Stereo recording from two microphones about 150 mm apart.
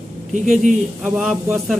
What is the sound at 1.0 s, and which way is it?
Speech, 5° right (ahead or behind).